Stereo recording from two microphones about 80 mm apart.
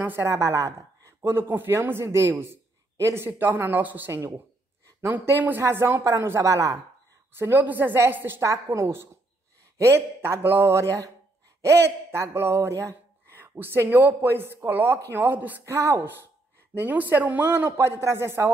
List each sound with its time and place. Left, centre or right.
0.2 s a man's voice: right
7.3 s a man's voice: right
15.6 s a man's voice: right
16.7 s speech: right